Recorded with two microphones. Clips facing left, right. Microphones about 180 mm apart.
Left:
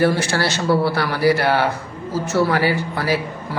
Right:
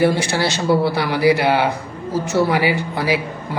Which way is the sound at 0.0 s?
15° right (ahead or behind).